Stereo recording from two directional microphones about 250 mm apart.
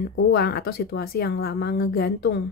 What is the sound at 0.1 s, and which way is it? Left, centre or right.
A woman's voice, left.